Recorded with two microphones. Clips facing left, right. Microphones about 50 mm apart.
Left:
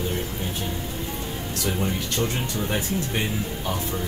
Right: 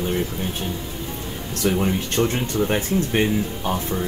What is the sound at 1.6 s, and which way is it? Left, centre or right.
Speech, right.